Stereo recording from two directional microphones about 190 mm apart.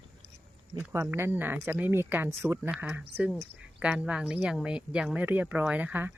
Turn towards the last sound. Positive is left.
turn(degrees=-10)  # may be behind; listen again after turning